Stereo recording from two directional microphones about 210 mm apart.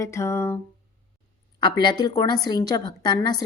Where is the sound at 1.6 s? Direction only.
20° left (ahead or behind).